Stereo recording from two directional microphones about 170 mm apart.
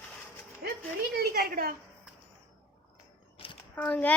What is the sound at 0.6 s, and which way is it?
A woman's voice, 65° right (ahead or behind).